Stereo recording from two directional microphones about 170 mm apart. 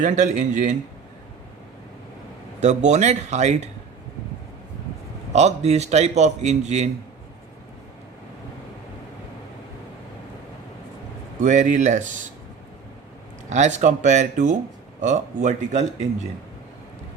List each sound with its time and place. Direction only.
0.0 s speech: 45° right (ahead or behind)
2.6 s speech: 45° right (ahead or behind)
5.3 s a man's voice: 40° right (ahead or behind)
11.4 s speech: 45° right (ahead or behind)
13.5 s speech: 45° right (ahead or behind)